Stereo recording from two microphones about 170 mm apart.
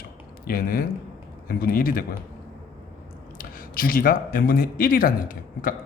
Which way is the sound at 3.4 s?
55° left (ahead or behind).